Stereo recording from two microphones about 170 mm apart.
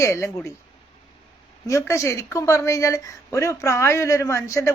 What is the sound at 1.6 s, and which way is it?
Speech, 15° left (ahead or behind).